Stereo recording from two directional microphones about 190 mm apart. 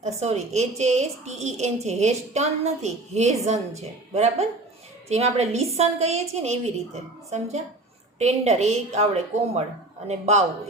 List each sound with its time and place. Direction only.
0.0 s a woman's voice: 35° right (ahead or behind)